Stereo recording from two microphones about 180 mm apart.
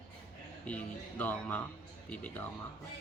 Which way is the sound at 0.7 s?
10° left (ahead or behind).